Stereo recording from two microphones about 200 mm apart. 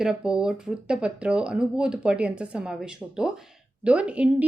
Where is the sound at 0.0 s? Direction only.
5° right (ahead or behind).